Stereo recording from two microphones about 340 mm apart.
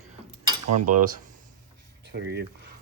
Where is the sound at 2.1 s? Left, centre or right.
Right.